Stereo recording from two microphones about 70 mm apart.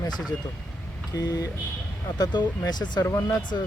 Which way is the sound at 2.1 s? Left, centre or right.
Left.